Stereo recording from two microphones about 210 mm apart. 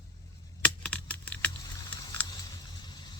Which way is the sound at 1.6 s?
20° left (ahead or behind).